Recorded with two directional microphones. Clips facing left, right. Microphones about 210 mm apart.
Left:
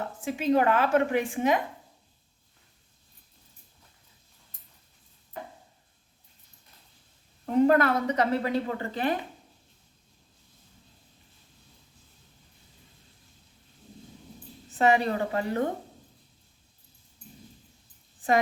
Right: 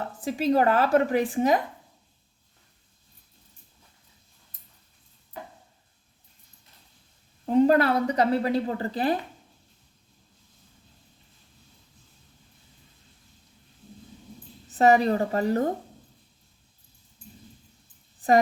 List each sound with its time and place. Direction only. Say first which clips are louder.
0.3 s a woman's voice: right 2 dB; 35° right (ahead or behind)
7.4 s a woman's voice: right 2 dB; 30° right (ahead or behind)
14.8 s a woman's voice: right 4 dB; 40° right (ahead or behind)